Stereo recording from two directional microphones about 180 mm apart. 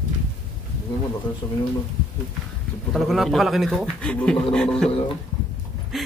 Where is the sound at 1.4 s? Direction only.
20° left (ahead or behind).